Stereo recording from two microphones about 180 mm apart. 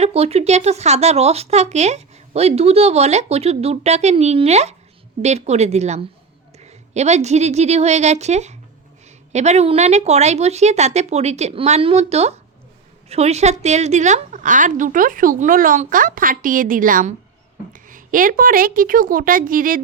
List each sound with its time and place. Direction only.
0.0 s a woman's voice: 35° right (ahead or behind)